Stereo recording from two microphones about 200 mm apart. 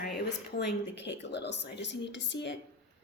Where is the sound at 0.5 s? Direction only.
60° left (ahead or behind).